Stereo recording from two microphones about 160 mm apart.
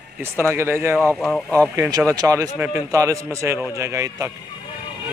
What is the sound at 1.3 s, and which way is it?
Speech, 10° left (ahead or behind).